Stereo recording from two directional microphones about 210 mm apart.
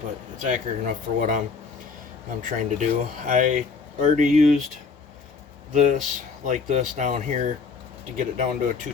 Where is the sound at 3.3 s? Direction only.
40° right (ahead or behind).